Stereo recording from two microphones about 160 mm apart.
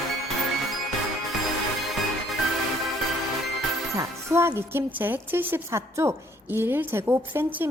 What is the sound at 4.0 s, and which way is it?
A woman's voice, 15° right (ahead or behind).